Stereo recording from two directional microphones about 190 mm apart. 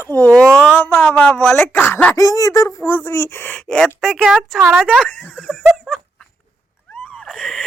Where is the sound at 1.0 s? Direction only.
5° left (ahead or behind).